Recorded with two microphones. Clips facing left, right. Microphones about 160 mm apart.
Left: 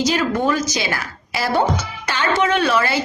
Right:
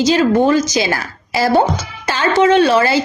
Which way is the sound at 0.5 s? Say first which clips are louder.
Right 7 dB; 90° right.